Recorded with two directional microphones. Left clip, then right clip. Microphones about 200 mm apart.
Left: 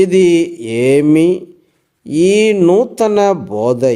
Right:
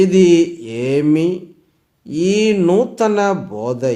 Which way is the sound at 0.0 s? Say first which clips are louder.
Left 1 dB; 40° left (ahead or behind).